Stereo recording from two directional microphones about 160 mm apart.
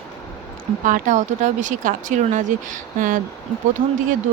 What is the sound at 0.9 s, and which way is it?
Speech, 50° right (ahead or behind).